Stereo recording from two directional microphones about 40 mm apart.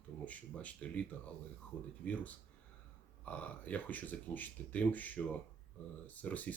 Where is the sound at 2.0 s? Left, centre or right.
Left.